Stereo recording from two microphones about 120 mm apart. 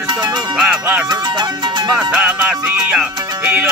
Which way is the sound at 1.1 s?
35° right (ahead or behind).